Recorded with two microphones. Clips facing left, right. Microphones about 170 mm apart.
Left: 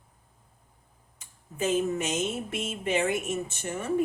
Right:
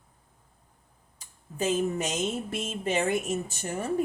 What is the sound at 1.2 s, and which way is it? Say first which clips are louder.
Speech: even; 35° right (ahead or behind).